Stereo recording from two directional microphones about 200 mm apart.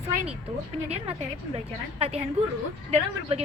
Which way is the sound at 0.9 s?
30° right (ahead or behind).